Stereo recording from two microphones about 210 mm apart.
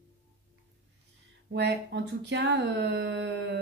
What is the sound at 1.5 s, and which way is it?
A woman's voice, 55° right (ahead or behind).